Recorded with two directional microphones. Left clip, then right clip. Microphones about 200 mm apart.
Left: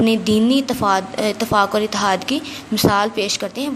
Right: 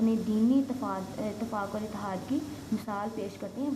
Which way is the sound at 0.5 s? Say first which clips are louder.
Left 14 dB; 35° left (ahead or behind).